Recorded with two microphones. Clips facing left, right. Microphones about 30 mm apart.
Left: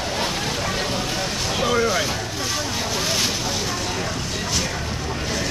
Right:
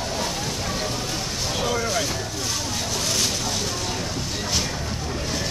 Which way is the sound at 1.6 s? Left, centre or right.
Left.